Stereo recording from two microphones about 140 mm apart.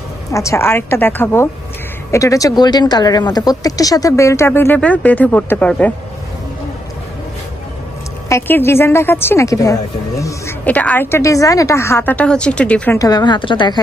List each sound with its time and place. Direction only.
0.3 s a woman's voice: 20° left (ahead or behind)
8.3 s speech: 15° left (ahead or behind)
10.6 s a woman's voice: 10° left (ahead or behind)
13.0 s a woman's voice: 30° left (ahead or behind)